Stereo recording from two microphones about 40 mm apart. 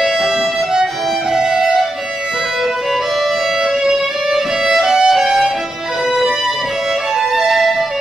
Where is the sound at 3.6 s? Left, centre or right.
Centre.